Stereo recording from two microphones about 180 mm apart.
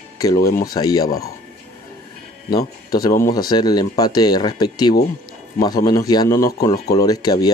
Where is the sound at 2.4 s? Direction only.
20° left (ahead or behind).